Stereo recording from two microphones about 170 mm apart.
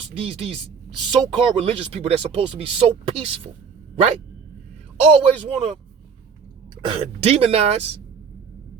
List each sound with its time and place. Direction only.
0.1 s speech: 35° right (ahead or behind)
3.9 s dog: 40° right (ahead or behind)
4.9 s a man's voice: 35° right (ahead or behind)
6.8 s speech: 35° right (ahead or behind)